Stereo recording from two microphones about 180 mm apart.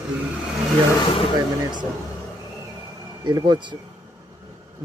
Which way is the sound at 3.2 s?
25° right (ahead or behind).